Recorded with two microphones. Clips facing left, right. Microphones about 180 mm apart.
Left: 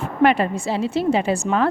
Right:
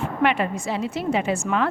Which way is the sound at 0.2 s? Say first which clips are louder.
Left 5 dB; 35° left (ahead or behind).